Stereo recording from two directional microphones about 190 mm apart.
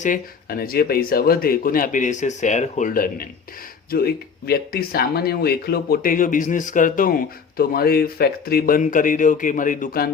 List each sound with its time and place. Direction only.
0.0 s speech: 50° left (ahead or behind)